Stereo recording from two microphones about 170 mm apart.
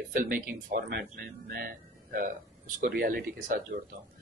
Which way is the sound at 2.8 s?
60° right (ahead or behind).